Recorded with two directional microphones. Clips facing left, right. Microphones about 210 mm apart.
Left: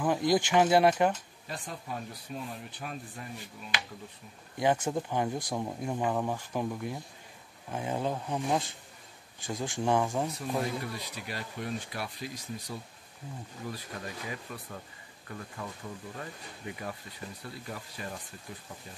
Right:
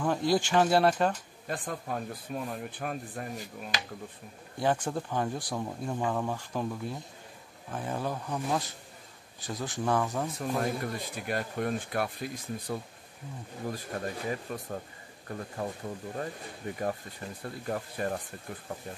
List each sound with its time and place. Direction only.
0.0 s speech: 15° left (ahead or behind)
1.5 s speech: 50° right (ahead or behind)
4.6 s speech: 20° left (ahead or behind)
10.8 s speech: 50° right (ahead or behind)